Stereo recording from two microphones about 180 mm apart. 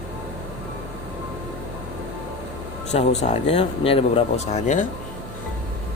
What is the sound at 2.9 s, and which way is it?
Speech, 40° left (ahead or behind).